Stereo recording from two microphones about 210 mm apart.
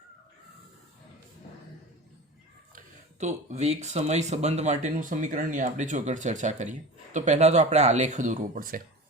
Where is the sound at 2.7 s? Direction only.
40° right (ahead or behind).